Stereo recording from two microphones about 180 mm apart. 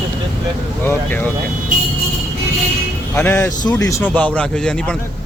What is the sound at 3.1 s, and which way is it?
Speech, 15° left (ahead or behind).